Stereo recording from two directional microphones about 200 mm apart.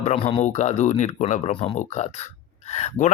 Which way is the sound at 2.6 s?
35° left (ahead or behind).